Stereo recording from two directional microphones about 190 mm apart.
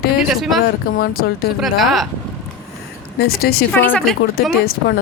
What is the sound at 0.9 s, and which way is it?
Speech, 50° left (ahead or behind).